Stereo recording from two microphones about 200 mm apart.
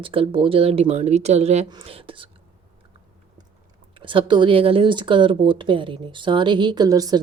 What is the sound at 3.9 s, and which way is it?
Speech, 25° right (ahead or behind).